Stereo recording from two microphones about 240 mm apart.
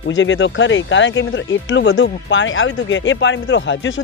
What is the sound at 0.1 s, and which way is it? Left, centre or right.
Speech, left.